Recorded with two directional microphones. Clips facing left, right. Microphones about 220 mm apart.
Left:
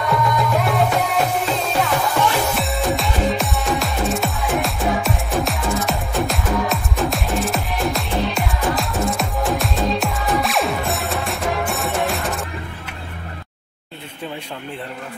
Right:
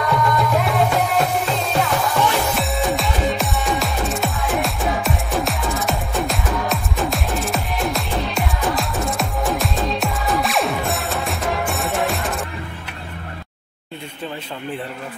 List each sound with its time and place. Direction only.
0.0 s music: centre (ahead or behind)